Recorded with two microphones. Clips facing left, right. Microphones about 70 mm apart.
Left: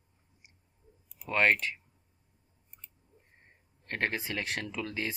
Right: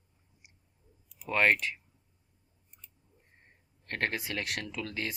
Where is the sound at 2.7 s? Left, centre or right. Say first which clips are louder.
Left 3 dB; left.